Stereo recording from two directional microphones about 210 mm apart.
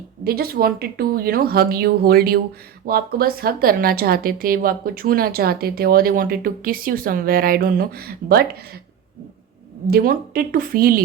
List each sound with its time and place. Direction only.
0.3 s a woman's voice: 45° right (ahead or behind)
9.8 s a woman's voice: 45° right (ahead or behind)